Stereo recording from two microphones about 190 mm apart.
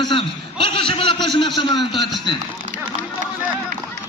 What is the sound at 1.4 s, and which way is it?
Speech, 25° left (ahead or behind).